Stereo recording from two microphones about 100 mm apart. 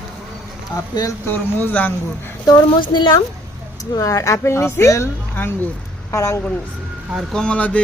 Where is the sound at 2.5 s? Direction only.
45° left (ahead or behind).